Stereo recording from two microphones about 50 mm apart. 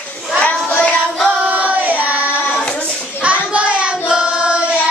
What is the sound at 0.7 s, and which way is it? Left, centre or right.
Child singing, left.